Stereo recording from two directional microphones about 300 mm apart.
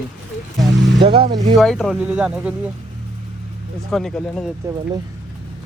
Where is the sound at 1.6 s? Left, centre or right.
Centre.